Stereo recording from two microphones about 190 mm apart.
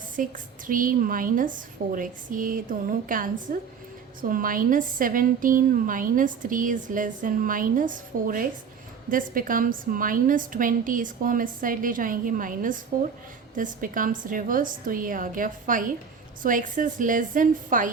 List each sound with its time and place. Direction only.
0.2 s a woman's voice: 45° right (ahead or behind)